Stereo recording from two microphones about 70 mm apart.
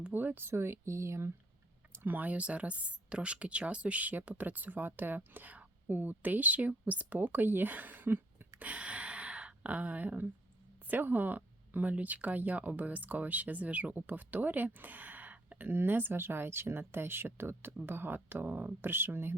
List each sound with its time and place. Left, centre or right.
0.1 s speech: right
1.9 s speech: right
8.5 s a sound: centre
10.8 s speech: right